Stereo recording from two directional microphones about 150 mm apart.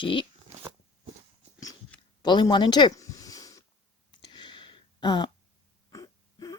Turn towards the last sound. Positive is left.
turn(degrees=25)  # may be behind; listen again after turning